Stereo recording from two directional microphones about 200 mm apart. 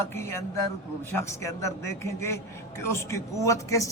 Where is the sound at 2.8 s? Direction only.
15° left (ahead or behind).